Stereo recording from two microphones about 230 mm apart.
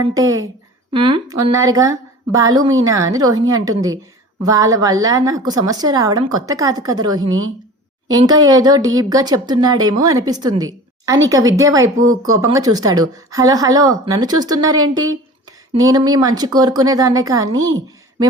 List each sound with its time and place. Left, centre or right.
0.0 s a woman's voice: centre